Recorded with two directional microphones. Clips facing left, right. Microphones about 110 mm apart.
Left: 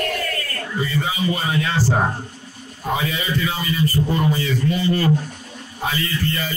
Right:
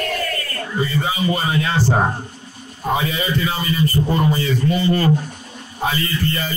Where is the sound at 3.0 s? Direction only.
35° right (ahead or behind).